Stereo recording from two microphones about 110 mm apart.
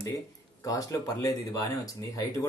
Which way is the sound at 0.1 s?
30° left (ahead or behind).